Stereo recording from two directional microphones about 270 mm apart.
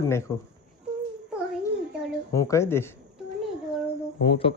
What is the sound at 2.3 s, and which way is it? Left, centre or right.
Speech, centre.